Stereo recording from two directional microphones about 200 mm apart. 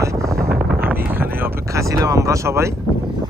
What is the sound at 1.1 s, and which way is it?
Speech, 10° right (ahead or behind).